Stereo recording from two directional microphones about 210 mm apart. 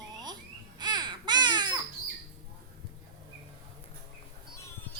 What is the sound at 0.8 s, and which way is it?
Baby cry, 20° right (ahead or behind).